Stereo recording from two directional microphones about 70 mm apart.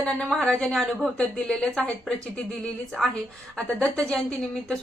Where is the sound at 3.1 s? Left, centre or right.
Centre.